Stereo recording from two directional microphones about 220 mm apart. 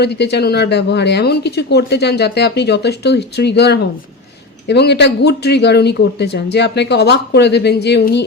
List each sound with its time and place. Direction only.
0.0 s speech: 50° left (ahead or behind)